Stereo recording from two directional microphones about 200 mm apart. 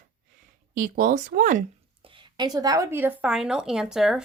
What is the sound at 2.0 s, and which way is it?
A woman's voice, 25° right (ahead or behind).